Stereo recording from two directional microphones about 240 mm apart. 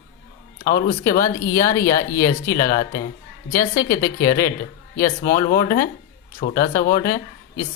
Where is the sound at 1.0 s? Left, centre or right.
Centre.